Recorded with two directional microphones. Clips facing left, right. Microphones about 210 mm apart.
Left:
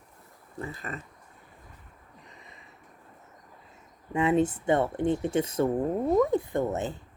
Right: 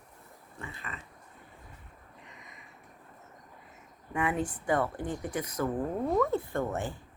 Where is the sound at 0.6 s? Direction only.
40° left (ahead or behind).